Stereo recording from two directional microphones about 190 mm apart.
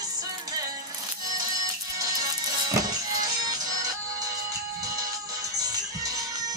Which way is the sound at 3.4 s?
20° right (ahead or behind).